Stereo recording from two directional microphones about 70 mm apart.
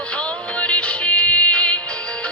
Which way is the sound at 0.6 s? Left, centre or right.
Centre.